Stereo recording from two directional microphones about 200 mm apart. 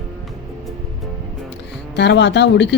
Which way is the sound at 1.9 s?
60° left (ahead or behind).